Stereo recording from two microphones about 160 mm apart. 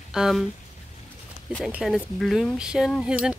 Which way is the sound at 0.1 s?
Centre (ahead or behind).